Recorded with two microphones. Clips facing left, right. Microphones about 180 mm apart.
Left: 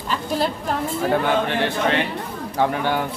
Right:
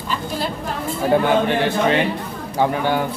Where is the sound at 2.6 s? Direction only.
5° right (ahead or behind).